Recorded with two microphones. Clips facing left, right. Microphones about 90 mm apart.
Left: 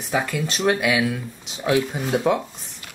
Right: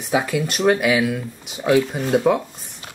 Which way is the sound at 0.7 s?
Centre (ahead or behind).